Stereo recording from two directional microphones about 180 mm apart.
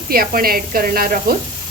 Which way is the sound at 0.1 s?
55° right (ahead or behind).